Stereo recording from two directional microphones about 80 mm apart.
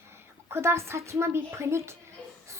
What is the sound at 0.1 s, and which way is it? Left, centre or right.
A woman's voice, right.